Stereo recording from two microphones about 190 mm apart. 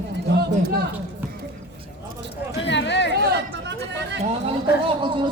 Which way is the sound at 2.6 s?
65° left (ahead or behind).